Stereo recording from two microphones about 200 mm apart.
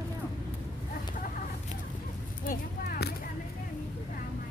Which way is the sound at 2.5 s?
50° left (ahead or behind).